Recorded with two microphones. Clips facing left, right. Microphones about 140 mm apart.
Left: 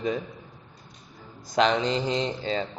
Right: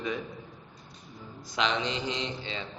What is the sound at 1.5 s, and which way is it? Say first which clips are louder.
A man's voice: left 7 dB; 40° left (ahead or behind).